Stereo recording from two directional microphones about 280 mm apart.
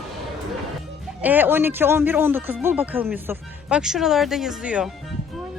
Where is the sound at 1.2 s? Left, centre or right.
Centre.